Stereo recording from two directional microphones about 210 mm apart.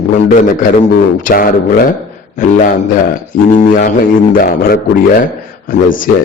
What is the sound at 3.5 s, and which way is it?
A man's voice, 40° left (ahead or behind).